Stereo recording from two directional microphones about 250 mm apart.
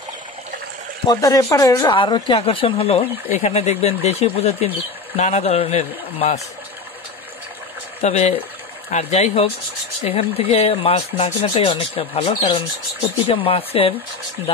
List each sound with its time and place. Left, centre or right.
1.0 s speech: centre
8.0 s speech: left